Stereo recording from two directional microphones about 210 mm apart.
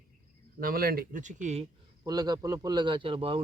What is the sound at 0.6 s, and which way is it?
Speech, 45° right (ahead or behind).